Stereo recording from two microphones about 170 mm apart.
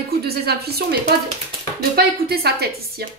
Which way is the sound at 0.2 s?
65° right (ahead or behind).